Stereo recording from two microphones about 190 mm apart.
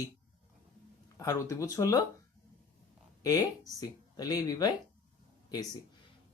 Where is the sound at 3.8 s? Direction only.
20° left (ahead or behind).